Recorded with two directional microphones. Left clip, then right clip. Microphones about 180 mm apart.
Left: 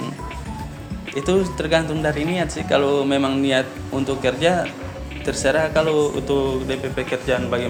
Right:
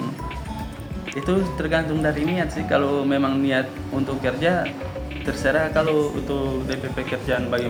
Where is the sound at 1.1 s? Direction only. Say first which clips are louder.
Left 4 dB; 45° left (ahead or behind).